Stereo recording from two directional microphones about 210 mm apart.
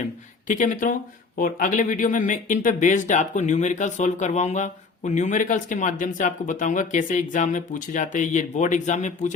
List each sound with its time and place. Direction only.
0.4 s speech: 35° left (ahead or behind)